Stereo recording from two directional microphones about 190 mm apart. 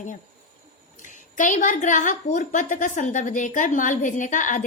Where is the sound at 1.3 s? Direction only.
45° left (ahead or behind).